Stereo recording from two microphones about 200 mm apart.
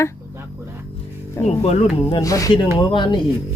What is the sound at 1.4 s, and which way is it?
A woman's voice, 35° left (ahead or behind).